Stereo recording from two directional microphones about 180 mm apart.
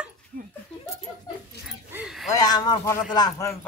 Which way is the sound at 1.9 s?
5° right (ahead or behind).